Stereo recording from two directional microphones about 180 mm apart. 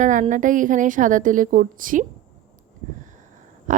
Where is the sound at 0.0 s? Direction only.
45° right (ahead or behind).